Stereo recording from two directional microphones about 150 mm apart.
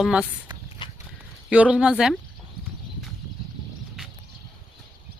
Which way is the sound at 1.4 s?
5° right (ahead or behind).